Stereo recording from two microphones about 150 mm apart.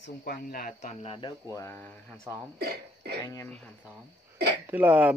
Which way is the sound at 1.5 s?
20° left (ahead or behind).